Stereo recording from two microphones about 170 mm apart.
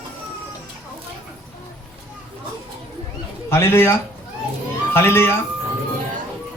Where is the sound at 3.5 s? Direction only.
15° left (ahead or behind).